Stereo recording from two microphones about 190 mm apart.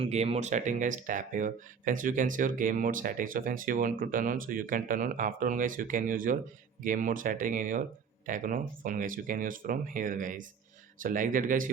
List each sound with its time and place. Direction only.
0.0 s speech: 35° right (ahead or behind)